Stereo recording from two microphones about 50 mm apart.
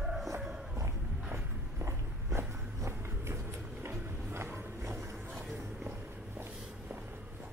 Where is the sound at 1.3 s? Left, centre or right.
Right.